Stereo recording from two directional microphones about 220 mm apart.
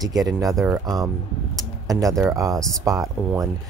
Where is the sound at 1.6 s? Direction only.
15° right (ahead or behind).